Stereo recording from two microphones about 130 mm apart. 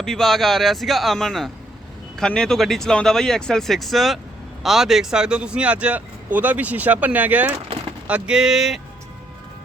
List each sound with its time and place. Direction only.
0.0 s speech: 5° left (ahead or behind)